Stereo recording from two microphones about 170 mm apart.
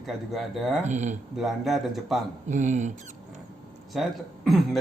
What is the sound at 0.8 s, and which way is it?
Speech, 45° right (ahead or behind).